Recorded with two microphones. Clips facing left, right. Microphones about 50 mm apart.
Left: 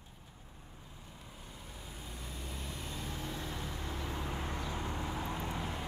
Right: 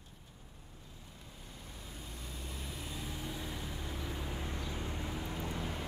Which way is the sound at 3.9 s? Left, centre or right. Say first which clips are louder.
Left 3 dB; left.